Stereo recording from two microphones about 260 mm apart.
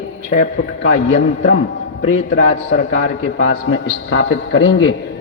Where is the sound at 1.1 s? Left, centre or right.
Left.